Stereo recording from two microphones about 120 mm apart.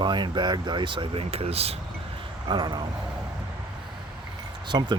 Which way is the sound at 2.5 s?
40° right (ahead or behind).